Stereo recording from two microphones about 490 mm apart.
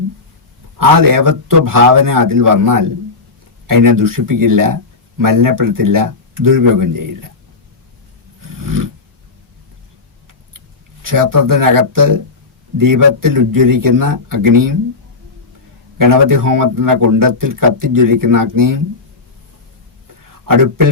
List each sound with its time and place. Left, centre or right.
0.8 s speech: right
8.4 s roar: right
11.0 s speech: right
16.0 s speech: right
20.5 s speech: right